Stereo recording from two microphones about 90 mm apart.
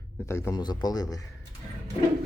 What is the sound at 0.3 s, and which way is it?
Speech, 35° left (ahead or behind).